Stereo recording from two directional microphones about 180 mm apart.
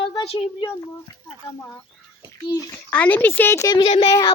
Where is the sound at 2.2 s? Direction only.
20° left (ahead or behind).